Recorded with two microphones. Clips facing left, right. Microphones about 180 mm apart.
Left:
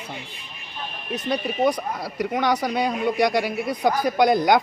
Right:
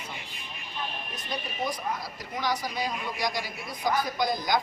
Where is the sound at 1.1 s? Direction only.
65° left (ahead or behind).